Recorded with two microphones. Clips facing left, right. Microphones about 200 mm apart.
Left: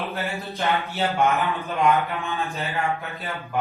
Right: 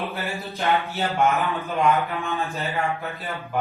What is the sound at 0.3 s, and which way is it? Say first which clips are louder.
A man's voice: right 3 dB; centre (ahead or behind).